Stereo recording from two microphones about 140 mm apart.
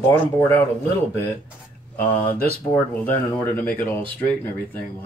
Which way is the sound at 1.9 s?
15° left (ahead or behind).